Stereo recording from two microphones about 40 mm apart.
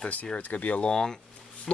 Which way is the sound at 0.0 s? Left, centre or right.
Left.